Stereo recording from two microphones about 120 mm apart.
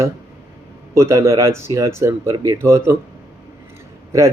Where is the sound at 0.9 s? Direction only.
25° right (ahead or behind).